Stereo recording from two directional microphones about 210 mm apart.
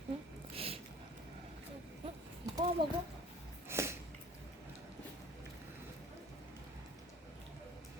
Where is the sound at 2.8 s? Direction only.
25° right (ahead or behind).